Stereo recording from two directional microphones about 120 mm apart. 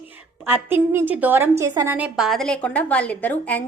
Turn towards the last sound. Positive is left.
turn(degrees=15)  # may be behind; listen again after turning